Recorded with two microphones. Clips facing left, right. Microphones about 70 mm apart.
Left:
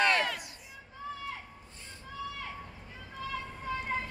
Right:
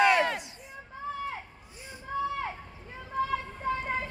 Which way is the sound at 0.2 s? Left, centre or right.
Right.